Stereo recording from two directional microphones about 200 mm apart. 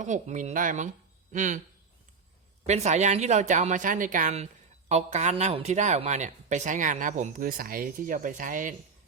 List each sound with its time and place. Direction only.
0.0 s speech: 35° right (ahead or behind)
2.6 s speech: 35° right (ahead or behind)